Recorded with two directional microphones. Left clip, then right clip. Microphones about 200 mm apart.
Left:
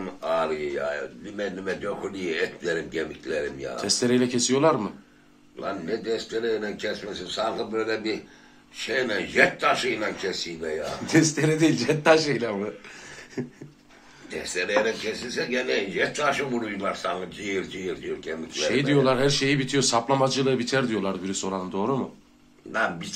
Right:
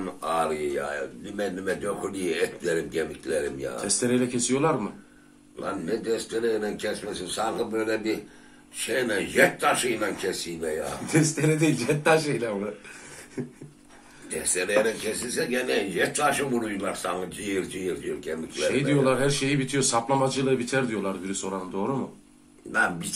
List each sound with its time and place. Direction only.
0.0 s speech: 10° right (ahead or behind)
3.7 s speech: 30° left (ahead or behind)
5.6 s speech: 5° right (ahead or behind)
10.9 s speech: 30° left (ahead or behind)
14.3 s speech: 5° right (ahead or behind)
18.7 s speech: 30° left (ahead or behind)
22.7 s speech: 10° right (ahead or behind)